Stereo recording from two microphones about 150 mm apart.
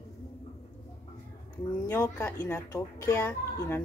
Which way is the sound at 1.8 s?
20° left (ahead or behind).